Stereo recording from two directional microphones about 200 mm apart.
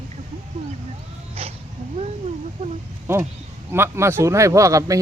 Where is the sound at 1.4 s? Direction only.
30° right (ahead or behind).